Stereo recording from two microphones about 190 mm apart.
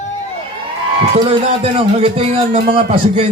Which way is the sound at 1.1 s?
30° right (ahead or behind).